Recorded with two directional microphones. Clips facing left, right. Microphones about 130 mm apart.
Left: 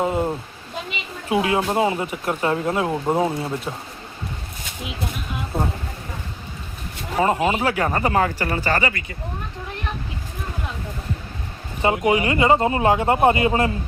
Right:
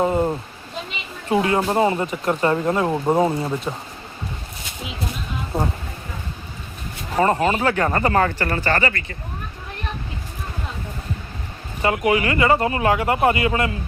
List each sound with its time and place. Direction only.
0.0 s speech: 5° left (ahead or behind)
7.2 s speech: 10° left (ahead or behind)
11.8 s speech: 25° left (ahead or behind)